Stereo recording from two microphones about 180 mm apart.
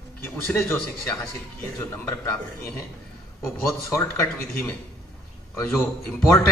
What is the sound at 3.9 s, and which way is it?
A man's voice, 15° left (ahead or behind).